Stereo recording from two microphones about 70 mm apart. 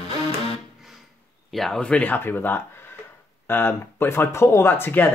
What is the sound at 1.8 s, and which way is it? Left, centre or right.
Speech, centre.